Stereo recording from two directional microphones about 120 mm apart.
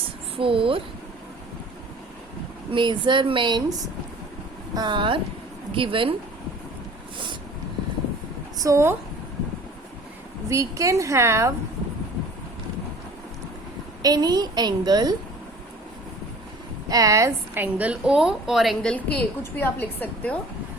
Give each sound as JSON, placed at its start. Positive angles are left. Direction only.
{"t": 0.3, "sound": "speech", "side_deg": -50}
{"t": 2.7, "sound": "a woman's voice", "side_deg": -40}
{"t": 8.5, "sound": "a woman's voice", "side_deg": -25}
{"t": 10.5, "sound": "a woman's voice", "side_deg": -25}
{"t": 14.0, "sound": "a woman's voice", "side_deg": -35}
{"t": 16.9, "sound": "a woman's voice", "side_deg": -30}